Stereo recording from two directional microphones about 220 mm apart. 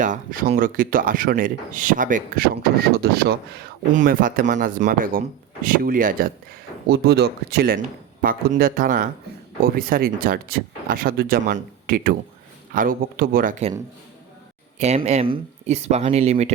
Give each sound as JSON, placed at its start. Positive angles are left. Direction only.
{"t": 0.0, "sound": "speech", "side_deg": -35}
{"t": 14.8, "sound": "speech", "side_deg": -30}